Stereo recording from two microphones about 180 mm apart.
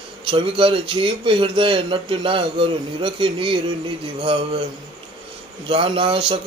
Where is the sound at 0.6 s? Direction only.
30° right (ahead or behind).